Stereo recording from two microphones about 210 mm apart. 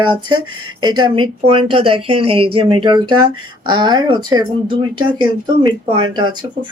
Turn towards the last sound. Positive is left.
turn(degrees=-20)  # may be behind; listen again after turning